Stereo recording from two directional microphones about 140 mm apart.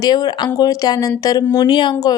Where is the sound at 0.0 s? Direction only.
30° left (ahead or behind).